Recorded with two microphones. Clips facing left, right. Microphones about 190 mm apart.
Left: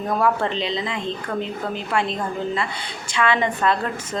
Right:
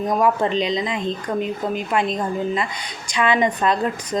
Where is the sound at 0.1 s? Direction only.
15° right (ahead or behind).